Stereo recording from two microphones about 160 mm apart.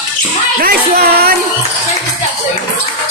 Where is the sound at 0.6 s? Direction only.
70° right (ahead or behind).